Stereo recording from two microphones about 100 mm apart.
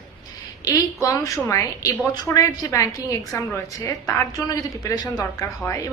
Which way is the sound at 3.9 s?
35° left (ahead or behind).